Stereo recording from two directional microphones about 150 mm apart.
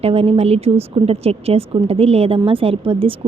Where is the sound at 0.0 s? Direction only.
40° right (ahead or behind).